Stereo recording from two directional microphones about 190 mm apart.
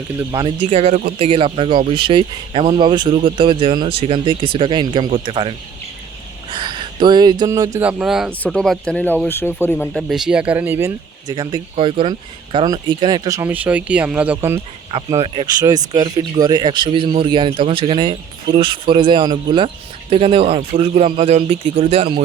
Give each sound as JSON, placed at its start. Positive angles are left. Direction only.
{"t": 0.3, "sound": "speech", "side_deg": -25}
{"t": 9.9, "sound": "speech", "side_deg": 0}
{"t": 15.2, "sound": "speech", "side_deg": -25}